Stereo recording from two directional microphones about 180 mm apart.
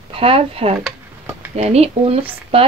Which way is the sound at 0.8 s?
10° right (ahead or behind).